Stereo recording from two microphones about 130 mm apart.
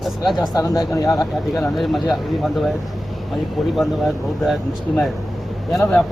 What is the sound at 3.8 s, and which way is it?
Speech, centre (ahead or behind).